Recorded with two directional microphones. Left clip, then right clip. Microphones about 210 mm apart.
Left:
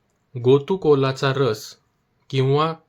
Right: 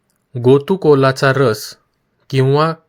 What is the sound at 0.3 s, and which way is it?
Speech, 35° right (ahead or behind).